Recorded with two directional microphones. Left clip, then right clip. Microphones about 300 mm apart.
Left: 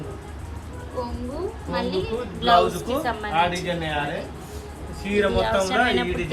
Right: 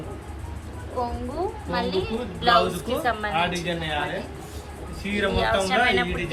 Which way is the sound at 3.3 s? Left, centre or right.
Left.